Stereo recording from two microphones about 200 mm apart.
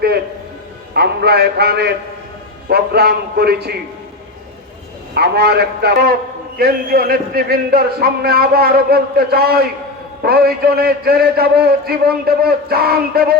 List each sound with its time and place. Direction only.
0.9 s a man's voice: 55° right (ahead or behind)
5.1 s a man's voice: 55° right (ahead or behind)